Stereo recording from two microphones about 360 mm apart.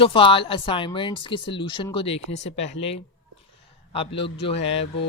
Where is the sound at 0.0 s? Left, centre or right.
Centre.